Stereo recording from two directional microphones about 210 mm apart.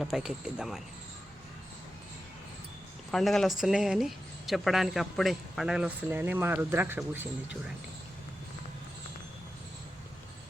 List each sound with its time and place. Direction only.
0.0 s speech: centre (ahead or behind)
3.1 s speech: centre (ahead or behind)